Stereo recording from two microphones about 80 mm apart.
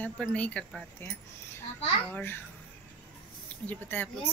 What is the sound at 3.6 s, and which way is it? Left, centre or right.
Speech, left.